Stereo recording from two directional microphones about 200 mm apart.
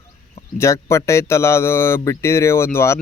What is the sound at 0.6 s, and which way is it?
Speech, 15° left (ahead or behind).